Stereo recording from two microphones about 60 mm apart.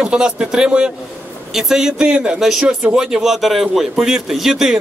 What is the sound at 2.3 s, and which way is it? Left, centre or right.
Speech, centre.